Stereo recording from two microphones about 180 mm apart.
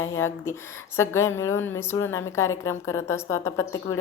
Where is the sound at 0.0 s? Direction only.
15° left (ahead or behind).